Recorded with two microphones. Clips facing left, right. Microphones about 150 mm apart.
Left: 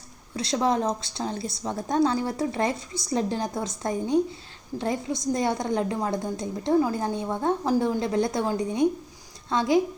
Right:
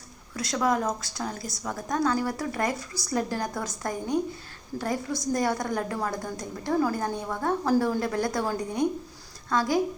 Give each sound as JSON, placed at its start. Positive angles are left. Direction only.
{"t": 0.3, "sound": "a woman's voice", "side_deg": 25}